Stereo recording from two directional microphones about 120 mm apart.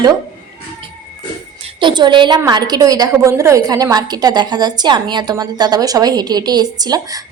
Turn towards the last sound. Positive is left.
turn(degrees=-30)  # may be behind; listen again after turning